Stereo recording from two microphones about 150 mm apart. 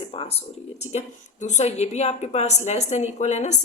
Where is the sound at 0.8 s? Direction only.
50° left (ahead or behind).